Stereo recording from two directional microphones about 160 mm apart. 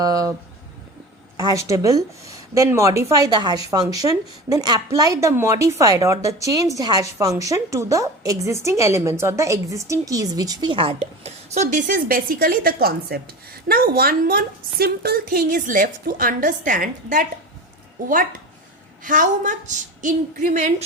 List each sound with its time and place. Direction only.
0.0 s a sound: 20° right (ahead or behind)
1.4 s a woman's voice: 20° right (ahead or behind); by 17.2 s 55° right (ahead or behind)
19.0 s a woman's voice: 55° right (ahead or behind)